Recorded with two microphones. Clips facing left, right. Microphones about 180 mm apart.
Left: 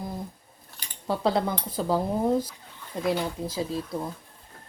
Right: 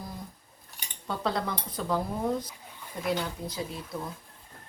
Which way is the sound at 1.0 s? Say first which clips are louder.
Left 6 dB; 30° left (ahead or behind).